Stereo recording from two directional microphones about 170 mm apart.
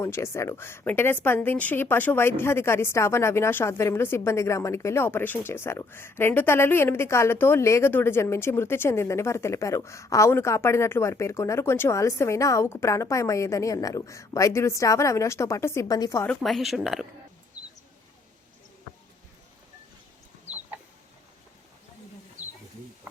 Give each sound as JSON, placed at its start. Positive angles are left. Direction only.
{"t": 0.0, "sound": "speech", "side_deg": 15}
{"t": 16.3, "sound": "speech", "side_deg": 0}